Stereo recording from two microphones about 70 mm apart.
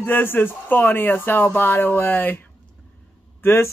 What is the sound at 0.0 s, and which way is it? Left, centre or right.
Speech, left.